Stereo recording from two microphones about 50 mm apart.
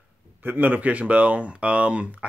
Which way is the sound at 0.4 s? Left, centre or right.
Right.